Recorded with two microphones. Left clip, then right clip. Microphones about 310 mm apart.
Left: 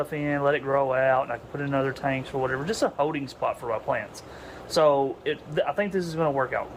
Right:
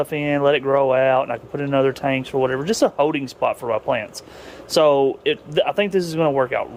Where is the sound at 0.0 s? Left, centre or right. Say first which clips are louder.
Right 7 dB; right.